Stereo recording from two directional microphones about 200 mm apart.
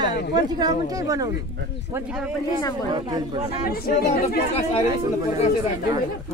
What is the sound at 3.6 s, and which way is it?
Speech, 50° left (ahead or behind).